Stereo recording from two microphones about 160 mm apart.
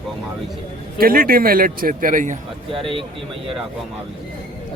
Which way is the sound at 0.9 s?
65° right (ahead or behind).